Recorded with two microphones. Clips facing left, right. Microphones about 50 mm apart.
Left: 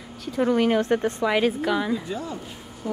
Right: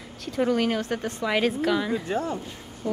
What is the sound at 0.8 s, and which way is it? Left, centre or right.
Speech, left.